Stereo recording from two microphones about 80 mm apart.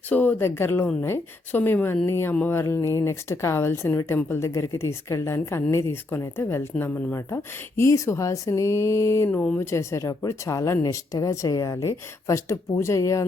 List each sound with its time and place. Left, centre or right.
0.1 s speech: left